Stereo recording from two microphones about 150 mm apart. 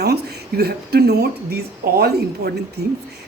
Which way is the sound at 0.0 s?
90° right.